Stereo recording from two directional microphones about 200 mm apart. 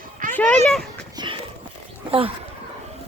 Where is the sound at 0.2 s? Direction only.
40° right (ahead or behind).